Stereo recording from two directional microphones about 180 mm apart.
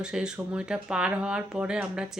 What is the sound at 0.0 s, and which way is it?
Speech, 5° right (ahead or behind).